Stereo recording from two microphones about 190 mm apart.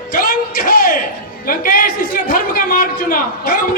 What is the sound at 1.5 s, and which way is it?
A man's voice, 45° left (ahead or behind).